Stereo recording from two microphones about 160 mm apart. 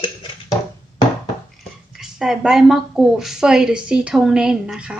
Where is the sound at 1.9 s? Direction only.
Centre (ahead or behind).